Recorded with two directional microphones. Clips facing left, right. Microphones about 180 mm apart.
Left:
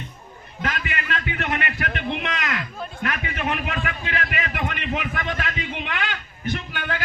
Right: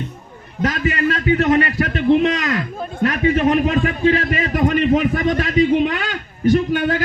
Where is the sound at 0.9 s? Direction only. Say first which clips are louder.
Right 12 dB; 40° right (ahead or behind).